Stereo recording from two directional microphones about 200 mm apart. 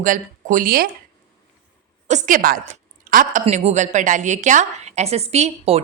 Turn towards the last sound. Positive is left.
turn(degrees=-30)  # may be behind; listen again after turning